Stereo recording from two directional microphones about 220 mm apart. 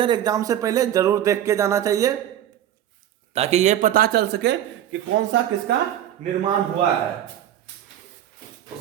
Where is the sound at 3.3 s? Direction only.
30° right (ahead or behind); by 4.5 s 45° right (ahead or behind).